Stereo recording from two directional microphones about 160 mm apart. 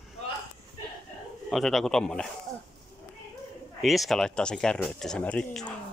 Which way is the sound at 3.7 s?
Centre (ahead or behind).